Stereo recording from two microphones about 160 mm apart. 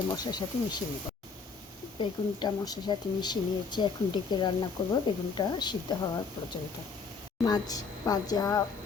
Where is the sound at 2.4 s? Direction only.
25° left (ahead or behind).